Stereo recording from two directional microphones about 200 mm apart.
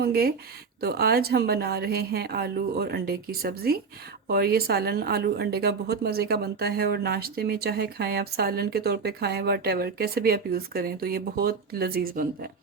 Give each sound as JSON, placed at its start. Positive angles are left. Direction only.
{"t": 0.0, "sound": "speech", "side_deg": -50}